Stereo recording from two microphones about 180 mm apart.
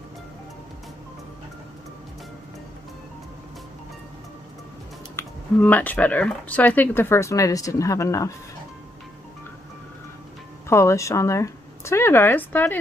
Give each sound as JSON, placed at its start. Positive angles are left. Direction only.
{"t": 5.1, "sound": "speech", "side_deg": 10}
{"t": 10.7, "sound": "speech", "side_deg": 15}